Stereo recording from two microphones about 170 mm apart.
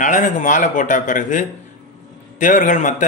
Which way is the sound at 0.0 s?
45° left (ahead or behind).